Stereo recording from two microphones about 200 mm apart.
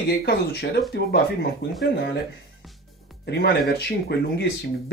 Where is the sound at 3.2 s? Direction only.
55° left (ahead or behind).